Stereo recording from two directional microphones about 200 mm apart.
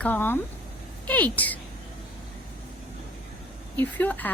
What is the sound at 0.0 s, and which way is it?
Speech, 10° left (ahead or behind).